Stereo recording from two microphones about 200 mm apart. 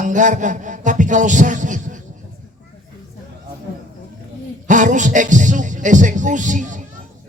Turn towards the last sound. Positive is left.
turn(degrees=-40)  # may be behind; listen again after turning